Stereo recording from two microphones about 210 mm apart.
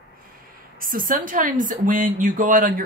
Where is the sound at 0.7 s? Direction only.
40° right (ahead or behind).